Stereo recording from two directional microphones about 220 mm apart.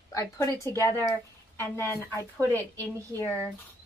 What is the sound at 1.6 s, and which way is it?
A woman's voice, 10° left (ahead or behind).